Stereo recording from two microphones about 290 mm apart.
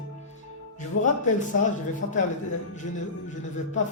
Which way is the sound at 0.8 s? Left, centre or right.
Left.